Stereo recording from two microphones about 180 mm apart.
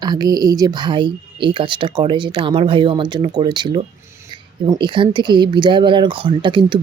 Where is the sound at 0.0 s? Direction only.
20° right (ahead or behind).